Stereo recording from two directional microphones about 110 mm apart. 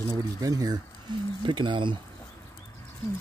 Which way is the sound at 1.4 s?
45° right (ahead or behind).